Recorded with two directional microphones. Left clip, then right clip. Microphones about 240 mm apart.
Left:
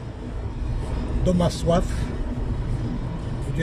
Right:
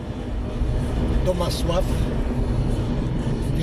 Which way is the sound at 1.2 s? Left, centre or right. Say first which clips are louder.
Left 2 dB; left.